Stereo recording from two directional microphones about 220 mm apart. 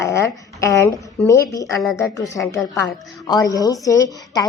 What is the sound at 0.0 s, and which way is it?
A woman's voice, 10° left (ahead or behind).